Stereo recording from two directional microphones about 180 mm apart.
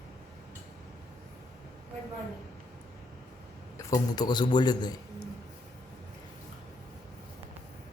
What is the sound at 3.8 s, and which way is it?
A man's voice, 20° left (ahead or behind).